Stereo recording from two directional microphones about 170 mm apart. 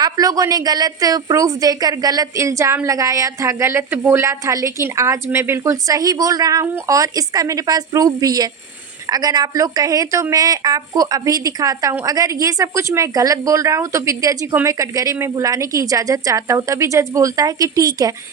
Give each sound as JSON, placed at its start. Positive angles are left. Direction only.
{"t": 0.0, "sound": "a woman's voice", "side_deg": -20}